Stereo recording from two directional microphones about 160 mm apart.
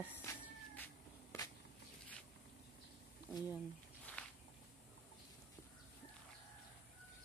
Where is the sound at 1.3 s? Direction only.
15° left (ahead or behind).